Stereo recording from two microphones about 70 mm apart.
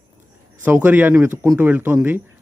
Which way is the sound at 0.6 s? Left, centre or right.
Right.